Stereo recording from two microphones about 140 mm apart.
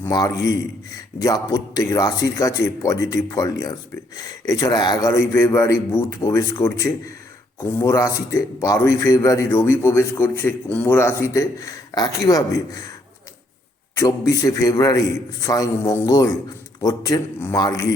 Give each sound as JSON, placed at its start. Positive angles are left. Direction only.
{"t": 0.1, "sound": "a man's voice", "side_deg": 25}
{"t": 14.0, "sound": "a man's voice", "side_deg": 20}